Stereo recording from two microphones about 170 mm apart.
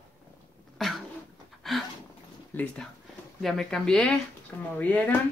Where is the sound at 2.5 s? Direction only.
10° left (ahead or behind).